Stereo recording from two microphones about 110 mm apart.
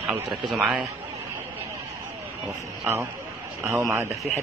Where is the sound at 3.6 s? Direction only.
25° right (ahead or behind).